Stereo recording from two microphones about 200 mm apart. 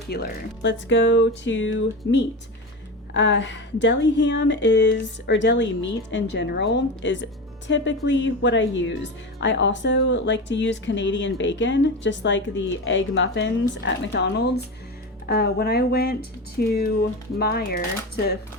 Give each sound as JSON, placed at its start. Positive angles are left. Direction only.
{"t": 0.1, "sound": "speech", "side_deg": 60}